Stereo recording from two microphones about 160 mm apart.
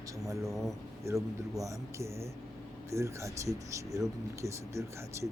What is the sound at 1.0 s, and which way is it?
Speech, 20° right (ahead or behind).